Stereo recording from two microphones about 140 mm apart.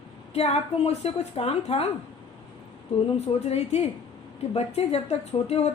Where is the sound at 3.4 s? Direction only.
50° left (ahead or behind).